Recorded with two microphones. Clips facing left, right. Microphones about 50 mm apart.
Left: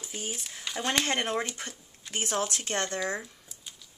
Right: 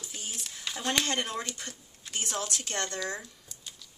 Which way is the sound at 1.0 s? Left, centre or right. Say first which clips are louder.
Left 3 dB; left.